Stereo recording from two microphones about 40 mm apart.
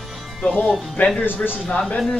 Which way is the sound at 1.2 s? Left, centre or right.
Left.